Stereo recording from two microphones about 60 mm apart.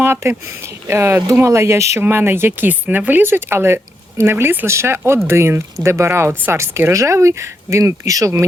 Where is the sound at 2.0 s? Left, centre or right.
Right.